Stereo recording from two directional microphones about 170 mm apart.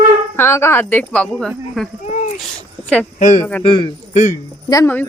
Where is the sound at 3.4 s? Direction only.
10° left (ahead or behind).